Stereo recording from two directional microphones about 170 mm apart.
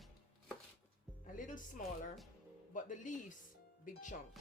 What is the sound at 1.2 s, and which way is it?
Speech, 50° left (ahead or behind).